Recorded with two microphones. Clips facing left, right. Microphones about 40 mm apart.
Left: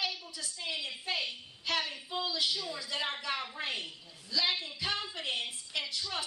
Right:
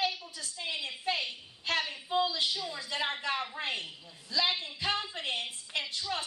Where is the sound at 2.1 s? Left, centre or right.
Right; by 3.6 s centre.